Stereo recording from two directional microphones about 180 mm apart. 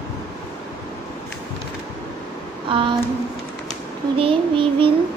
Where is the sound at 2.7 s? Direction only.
30° right (ahead or behind).